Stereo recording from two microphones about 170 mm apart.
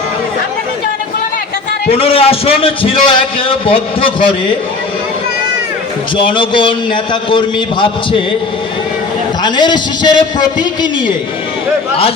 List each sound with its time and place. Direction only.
1.9 s a man's voice: 35° left (ahead or behind)
6.1 s a man's voice: 30° left (ahead or behind)
9.4 s a man's voice: 25° left (ahead or behind)